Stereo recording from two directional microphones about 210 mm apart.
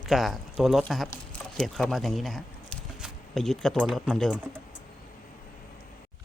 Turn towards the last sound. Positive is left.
turn(degrees=0)  # may be behind; listen again after turning